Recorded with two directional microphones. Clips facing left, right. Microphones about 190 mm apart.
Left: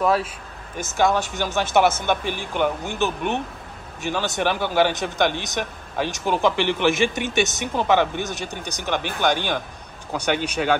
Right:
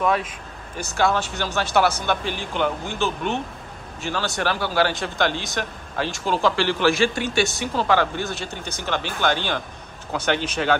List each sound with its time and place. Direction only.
0.8 s speech: 15° left (ahead or behind)